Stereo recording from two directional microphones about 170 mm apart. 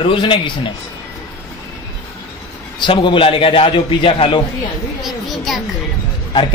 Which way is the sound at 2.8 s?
30° left (ahead or behind).